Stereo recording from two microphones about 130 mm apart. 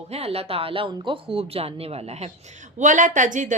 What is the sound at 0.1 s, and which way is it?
Speech, 50° right (ahead or behind).